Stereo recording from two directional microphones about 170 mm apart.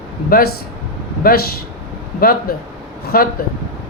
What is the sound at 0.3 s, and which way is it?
Speech, 60° left (ahead or behind).